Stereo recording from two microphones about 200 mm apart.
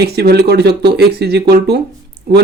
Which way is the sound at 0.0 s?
55° right (ahead or behind).